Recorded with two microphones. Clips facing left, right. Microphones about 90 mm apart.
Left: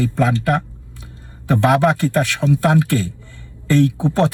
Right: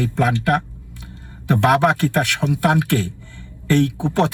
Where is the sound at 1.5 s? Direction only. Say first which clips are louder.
Left 1 dB; 20° right (ahead or behind).